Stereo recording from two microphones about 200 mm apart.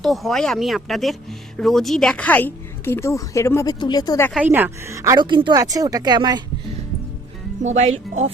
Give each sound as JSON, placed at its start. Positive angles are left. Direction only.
{"t": 0.0, "sound": "speech", "side_deg": 0}
{"t": 4.4, "sound": "speech", "side_deg": -10}
{"t": 7.6, "sound": "speech", "side_deg": -35}